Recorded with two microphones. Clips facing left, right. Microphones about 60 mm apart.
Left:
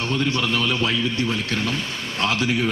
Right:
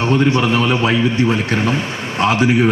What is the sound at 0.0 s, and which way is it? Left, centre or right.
A man's voice, right.